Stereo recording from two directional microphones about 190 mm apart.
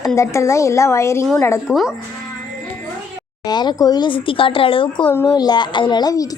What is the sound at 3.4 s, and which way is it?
A woman's voice, 20° left (ahead or behind).